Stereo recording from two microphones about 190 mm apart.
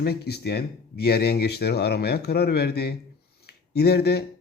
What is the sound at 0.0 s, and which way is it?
Speech, 55° left (ahead or behind).